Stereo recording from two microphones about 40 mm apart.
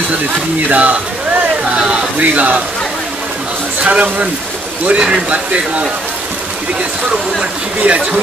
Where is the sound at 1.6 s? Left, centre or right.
Right.